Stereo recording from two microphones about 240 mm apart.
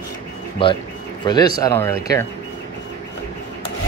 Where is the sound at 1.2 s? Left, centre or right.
Centre.